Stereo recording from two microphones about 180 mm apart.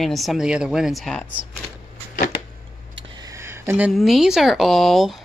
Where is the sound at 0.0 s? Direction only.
Centre (ahead or behind).